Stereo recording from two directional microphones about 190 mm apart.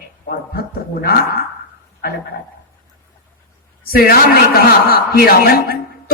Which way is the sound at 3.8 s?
50° left (ahead or behind).